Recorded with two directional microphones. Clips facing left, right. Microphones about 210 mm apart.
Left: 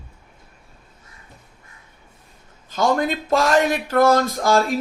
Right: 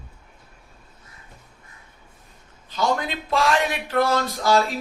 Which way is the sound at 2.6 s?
45° left (ahead or behind).